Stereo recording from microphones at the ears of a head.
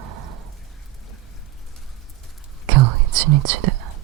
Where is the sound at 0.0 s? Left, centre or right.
Right.